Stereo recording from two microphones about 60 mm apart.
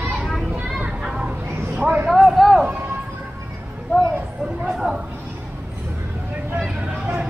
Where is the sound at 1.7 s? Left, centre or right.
Right.